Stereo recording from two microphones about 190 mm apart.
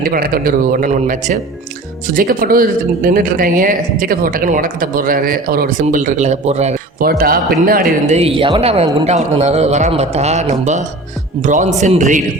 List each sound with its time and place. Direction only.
0.0 s speech: 50° right (ahead or behind)
7.0 s speech: 50° right (ahead or behind)
8.1 s a man's voice: 30° right (ahead or behind)